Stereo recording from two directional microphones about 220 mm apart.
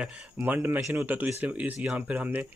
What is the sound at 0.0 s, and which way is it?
Speech, 5° right (ahead or behind).